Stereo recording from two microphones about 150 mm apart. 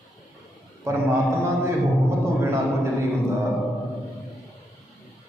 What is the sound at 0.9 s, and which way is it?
Speech, 20° right (ahead or behind).